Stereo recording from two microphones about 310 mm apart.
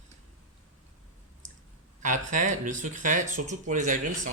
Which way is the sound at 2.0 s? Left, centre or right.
Right.